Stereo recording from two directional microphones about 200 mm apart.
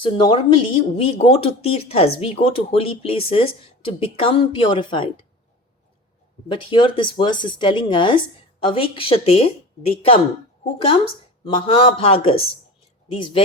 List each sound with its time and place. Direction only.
0.0 s speech: 25° left (ahead or behind)
6.5 s speech: 25° left (ahead or behind)
11.5 s speech: 25° left (ahead or behind)